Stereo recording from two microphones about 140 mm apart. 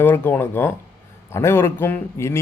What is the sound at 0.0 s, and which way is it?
Speech, 15° left (ahead or behind).